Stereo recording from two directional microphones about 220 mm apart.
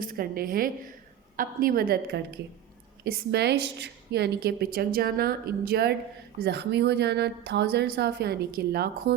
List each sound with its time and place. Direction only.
0.0 s a woman's voice: 40° right (ahead or behind)